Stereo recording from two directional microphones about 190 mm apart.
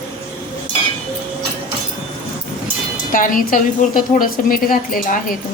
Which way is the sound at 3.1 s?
45° left (ahead or behind).